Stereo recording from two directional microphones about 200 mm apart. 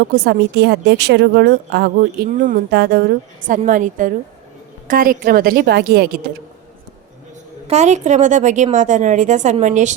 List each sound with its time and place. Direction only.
0.1 s a woman's voice: 55° right (ahead or behind)
7.7 s a woman's voice: 35° right (ahead or behind)